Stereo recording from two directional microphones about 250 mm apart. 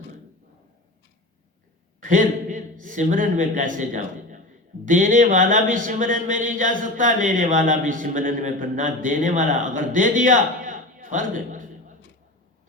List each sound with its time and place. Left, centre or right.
2.0 s a man's voice: right